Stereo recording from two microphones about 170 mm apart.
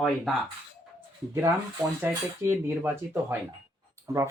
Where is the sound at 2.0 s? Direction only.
10° right (ahead or behind).